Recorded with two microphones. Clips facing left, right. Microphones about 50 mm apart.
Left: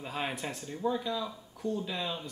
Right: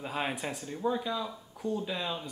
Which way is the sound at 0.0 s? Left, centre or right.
Centre.